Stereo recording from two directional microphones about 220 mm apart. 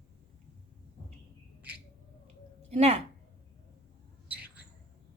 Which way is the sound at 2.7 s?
30° right (ahead or behind).